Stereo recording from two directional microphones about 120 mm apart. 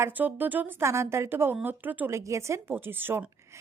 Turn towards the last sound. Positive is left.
turn(degrees=-15)  # may be behind; listen again after turning